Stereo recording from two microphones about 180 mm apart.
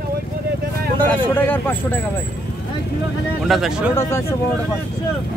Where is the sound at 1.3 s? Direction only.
10° left (ahead or behind).